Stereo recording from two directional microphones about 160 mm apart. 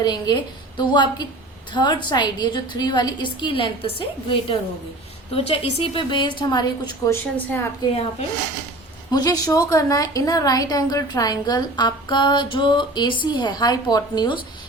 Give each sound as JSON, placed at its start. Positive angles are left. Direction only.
{"t": 0.0, "sound": "a woman's voice", "side_deg": 25}
{"t": 9.0, "sound": "a woman's voice", "side_deg": 25}